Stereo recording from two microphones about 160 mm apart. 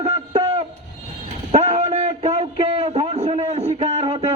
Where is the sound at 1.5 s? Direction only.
40° right (ahead or behind).